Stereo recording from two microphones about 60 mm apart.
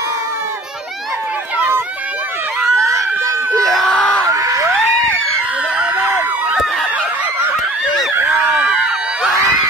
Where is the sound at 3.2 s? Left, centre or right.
Right.